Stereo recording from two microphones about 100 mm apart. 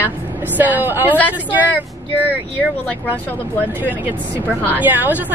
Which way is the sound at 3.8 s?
15° right (ahead or behind).